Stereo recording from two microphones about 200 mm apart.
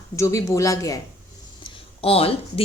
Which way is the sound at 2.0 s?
30° left (ahead or behind).